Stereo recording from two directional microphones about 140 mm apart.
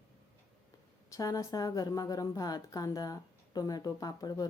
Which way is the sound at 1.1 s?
25° left (ahead or behind).